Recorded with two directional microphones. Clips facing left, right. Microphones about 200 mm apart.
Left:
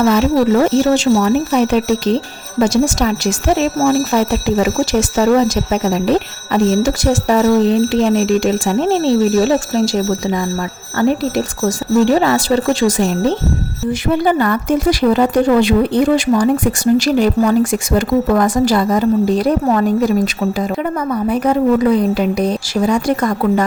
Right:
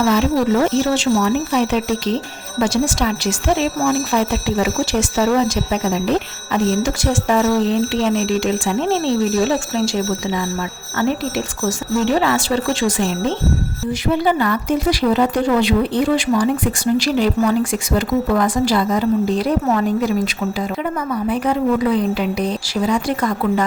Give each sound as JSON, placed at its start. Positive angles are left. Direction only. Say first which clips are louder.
{"t": 0.0, "sound": "speech", "louder": "left 4 dB", "side_deg": 45}